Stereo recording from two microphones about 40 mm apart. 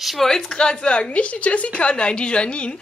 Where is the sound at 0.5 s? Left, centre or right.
Left.